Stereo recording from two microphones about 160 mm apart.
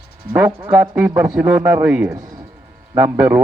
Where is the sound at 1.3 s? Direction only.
10° right (ahead or behind).